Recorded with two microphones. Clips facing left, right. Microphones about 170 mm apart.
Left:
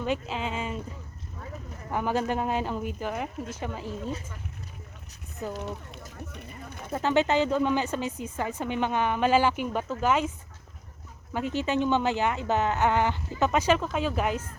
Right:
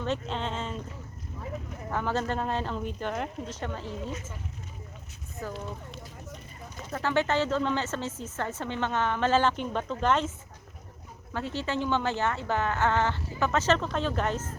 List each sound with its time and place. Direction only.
0.0 s speech: 10° left (ahead or behind)
1.9 s speech: 15° left (ahead or behind)
5.4 s speech: 20° left (ahead or behind)
6.3 s speech: 60° left (ahead or behind)
6.9 s speech: 20° left (ahead or behind)
11.3 s speech: 15° left (ahead or behind)